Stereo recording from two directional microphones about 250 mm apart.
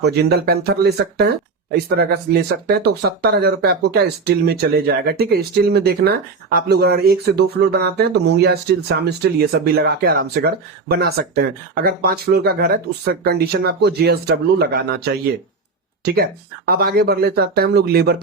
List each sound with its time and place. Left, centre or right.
0.0 s speech: right